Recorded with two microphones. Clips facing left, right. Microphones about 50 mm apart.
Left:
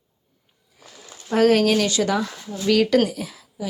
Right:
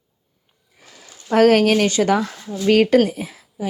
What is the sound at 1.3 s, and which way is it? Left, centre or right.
Speech, right.